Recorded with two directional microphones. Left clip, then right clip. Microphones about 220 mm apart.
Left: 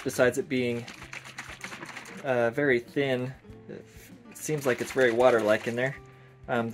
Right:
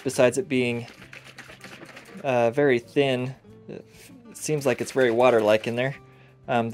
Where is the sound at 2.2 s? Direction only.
35° right (ahead or behind).